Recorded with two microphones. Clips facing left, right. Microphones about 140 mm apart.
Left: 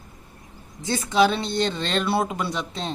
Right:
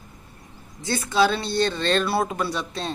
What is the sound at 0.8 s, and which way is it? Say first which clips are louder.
Speech: left 1 dB; 20° left (ahead or behind).